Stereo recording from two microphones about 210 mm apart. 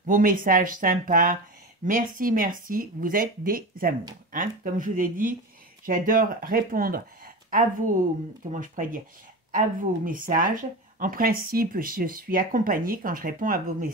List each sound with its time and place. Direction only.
0.0 s speech: 40° right (ahead or behind)